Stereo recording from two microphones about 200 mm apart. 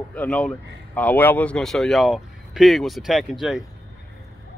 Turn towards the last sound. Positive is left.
turn(degrees=0)  # may be behind; listen again after turning